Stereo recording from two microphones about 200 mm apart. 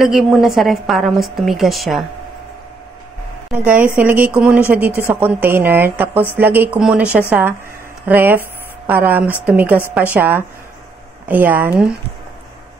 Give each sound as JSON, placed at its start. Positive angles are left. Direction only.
{"t": 0.0, "sound": "a woman's voice", "side_deg": 0}
{"t": 3.5, "sound": "a woman's voice", "side_deg": -5}